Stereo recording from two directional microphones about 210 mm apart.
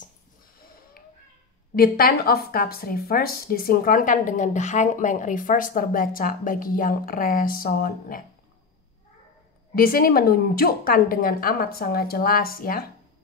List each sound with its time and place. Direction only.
1.8 s a woman's voice: 45° left (ahead or behind)
9.8 s a woman's voice: 45° left (ahead or behind)